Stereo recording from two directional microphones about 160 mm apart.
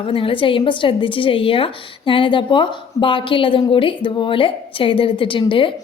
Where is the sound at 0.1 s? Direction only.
35° left (ahead or behind).